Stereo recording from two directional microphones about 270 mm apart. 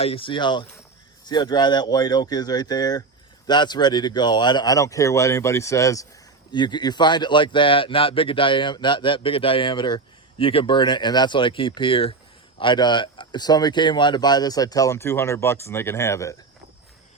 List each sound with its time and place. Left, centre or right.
0.0 s a man's voice: centre